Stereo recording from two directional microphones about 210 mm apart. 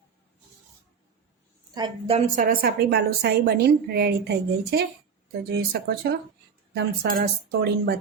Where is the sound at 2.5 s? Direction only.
45° right (ahead or behind).